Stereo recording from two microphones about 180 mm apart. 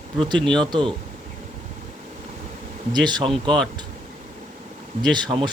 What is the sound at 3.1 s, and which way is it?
Speech, 25° right (ahead or behind).